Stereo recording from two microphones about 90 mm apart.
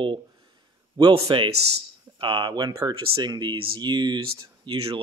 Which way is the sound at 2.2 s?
65° right (ahead or behind).